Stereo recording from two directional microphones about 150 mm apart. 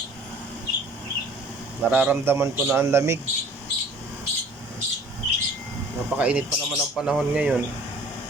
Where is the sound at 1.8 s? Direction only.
10° right (ahead or behind).